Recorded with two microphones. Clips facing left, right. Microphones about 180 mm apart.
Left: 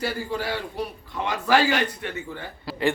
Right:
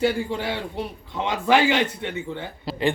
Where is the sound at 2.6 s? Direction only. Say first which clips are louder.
Right 1 dB; 20° right (ahead or behind).